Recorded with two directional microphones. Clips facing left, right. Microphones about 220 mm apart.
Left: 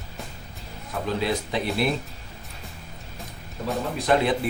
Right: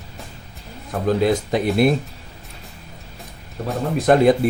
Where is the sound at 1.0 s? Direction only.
45° right (ahead or behind).